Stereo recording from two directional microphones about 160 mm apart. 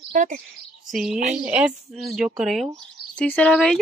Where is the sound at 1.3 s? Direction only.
10° right (ahead or behind).